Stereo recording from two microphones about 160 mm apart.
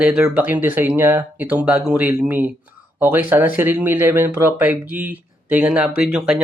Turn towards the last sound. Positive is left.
turn(degrees=-5)  # may be behind; listen again after turning